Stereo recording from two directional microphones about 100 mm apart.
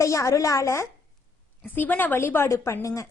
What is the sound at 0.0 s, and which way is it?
Speech, 30° left (ahead or behind).